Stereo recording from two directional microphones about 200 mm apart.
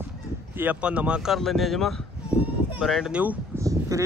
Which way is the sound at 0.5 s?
5° right (ahead or behind).